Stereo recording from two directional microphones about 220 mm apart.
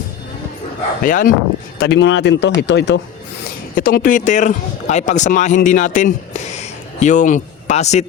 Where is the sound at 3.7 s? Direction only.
40° left (ahead or behind).